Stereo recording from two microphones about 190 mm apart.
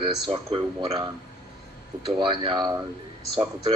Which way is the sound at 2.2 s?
25° right (ahead or behind).